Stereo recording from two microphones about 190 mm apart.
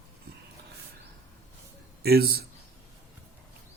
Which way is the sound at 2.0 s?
55° right (ahead or behind).